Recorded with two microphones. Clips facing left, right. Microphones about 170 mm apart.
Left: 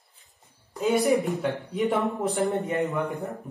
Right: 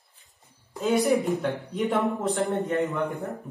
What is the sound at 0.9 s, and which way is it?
Speech, centre (ahead or behind).